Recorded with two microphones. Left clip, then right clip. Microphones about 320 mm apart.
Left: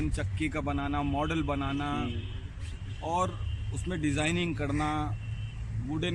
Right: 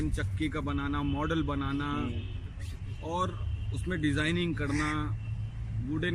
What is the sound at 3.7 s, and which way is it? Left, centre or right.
Speech, centre.